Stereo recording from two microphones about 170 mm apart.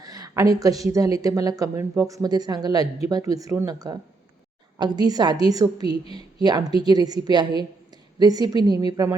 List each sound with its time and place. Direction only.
0.0 s a woman's voice: 20° right (ahead or behind)